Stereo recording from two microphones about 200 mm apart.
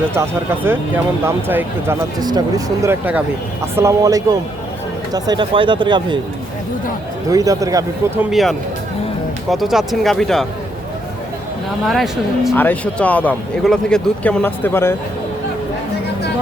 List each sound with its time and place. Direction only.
0.1 s speech: 10° right (ahead or behind)
7.3 s speech: 15° right (ahead or behind)
8.3 s speech: centre (ahead or behind)
11.9 s speech: centre (ahead or behind)